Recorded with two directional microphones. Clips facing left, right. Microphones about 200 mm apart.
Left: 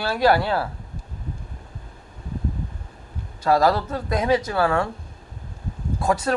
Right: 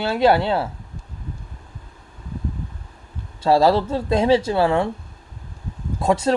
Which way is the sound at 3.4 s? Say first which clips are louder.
Right 3 dB; 25° right (ahead or behind).